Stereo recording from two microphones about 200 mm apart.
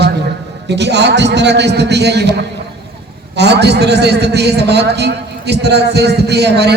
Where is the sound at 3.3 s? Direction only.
55° right (ahead or behind).